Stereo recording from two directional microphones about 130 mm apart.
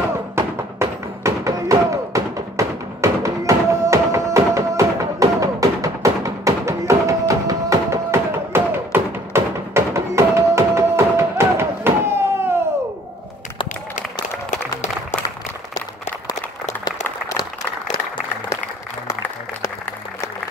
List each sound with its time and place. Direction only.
0.4 s music: 20° right (ahead or behind)
14.5 s applause: 65° left (ahead or behind)
19.0 s applause: 20° left (ahead or behind)